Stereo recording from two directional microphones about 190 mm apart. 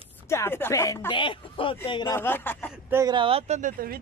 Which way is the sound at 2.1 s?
10° left (ahead or behind).